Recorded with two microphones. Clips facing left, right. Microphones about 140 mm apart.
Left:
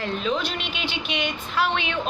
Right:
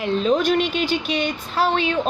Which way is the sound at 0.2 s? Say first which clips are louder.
Right 8 dB; 45° right (ahead or behind).